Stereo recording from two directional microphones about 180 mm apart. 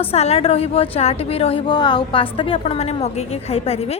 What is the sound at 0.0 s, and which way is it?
A woman's voice, 35° left (ahead or behind).